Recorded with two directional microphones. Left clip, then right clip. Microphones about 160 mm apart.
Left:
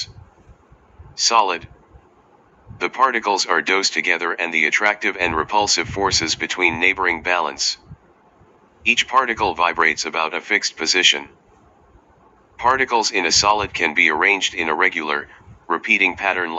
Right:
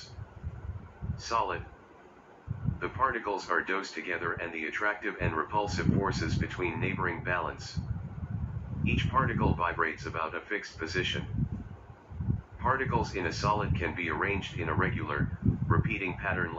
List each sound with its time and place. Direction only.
2.8 s speech: 65° left (ahead or behind)
3.4 s speech: 70° left (ahead or behind)
9.1 s speech: 65° left (ahead or behind)
12.6 s speech: 65° left (ahead or behind)